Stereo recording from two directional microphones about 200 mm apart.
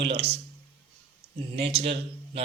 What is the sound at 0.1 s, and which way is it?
Speech, 30° right (ahead or behind).